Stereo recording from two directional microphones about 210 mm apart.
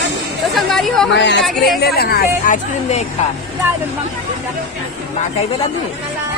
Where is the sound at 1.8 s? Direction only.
50° left (ahead or behind).